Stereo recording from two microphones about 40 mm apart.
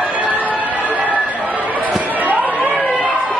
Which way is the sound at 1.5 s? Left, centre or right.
Right.